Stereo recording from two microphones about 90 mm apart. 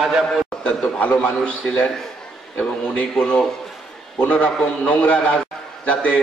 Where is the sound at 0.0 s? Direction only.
5° right (ahead or behind).